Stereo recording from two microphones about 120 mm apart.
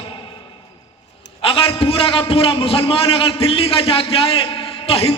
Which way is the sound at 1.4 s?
50° left (ahead or behind).